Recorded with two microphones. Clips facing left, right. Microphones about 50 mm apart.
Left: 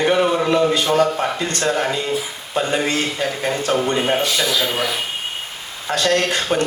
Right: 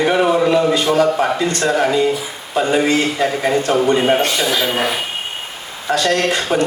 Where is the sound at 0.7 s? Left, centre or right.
Right.